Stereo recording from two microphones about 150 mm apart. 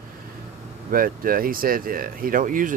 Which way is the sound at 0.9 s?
70° right (ahead or behind).